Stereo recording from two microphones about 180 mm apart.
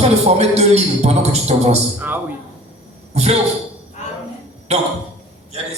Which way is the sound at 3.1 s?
35° right (ahead or behind).